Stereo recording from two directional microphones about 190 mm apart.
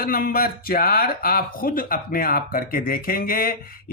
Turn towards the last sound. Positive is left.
turn(degrees=50)  # may be behind; listen again after turning